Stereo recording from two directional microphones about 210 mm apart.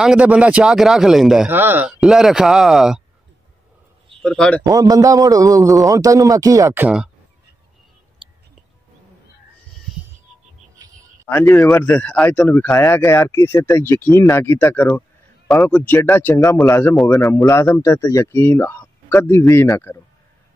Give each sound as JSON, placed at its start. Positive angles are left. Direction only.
{"t": 0.0, "sound": "speech", "side_deg": -5}
{"t": 4.2, "sound": "speech", "side_deg": 5}
{"t": 4.6, "sound": "a man's voice", "side_deg": -15}
{"t": 11.2, "sound": "a man's voice", "side_deg": 10}
{"t": 17.7, "sound": "a man's voice", "side_deg": 15}